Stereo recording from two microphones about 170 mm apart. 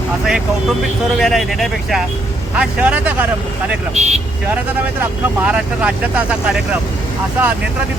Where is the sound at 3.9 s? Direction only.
40° right (ahead or behind).